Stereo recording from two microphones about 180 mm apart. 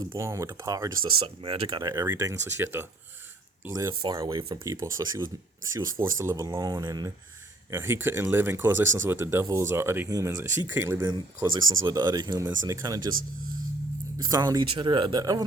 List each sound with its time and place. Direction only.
0.0 s speech: 20° right (ahead or behind)
11.1 s speech: 25° right (ahead or behind)
14.2 s speech: 20° right (ahead or behind)